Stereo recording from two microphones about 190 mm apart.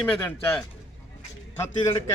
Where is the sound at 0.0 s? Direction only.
5° left (ahead or behind).